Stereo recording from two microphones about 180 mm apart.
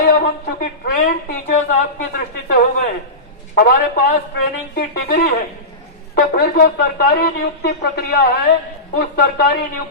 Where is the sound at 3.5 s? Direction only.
60° left (ahead or behind).